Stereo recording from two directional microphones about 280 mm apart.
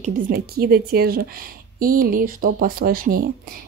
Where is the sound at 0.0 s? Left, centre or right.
Right.